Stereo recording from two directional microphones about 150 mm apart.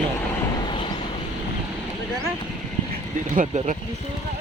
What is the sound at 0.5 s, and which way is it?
Vehicle, 30° left (ahead or behind).